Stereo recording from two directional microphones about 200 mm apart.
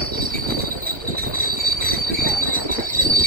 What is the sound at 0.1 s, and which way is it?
Train, 45° right (ahead or behind).